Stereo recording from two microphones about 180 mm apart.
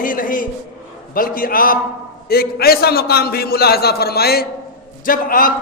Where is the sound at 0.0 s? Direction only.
50° left (ahead or behind).